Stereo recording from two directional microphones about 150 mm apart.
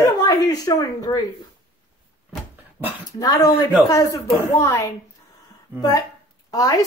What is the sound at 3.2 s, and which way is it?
Speech, 25° left (ahead or behind).